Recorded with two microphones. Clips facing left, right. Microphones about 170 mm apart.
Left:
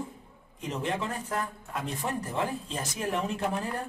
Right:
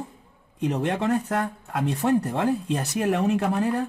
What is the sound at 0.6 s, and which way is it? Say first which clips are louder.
Speech: right 7 dB; 70° right (ahead or behind).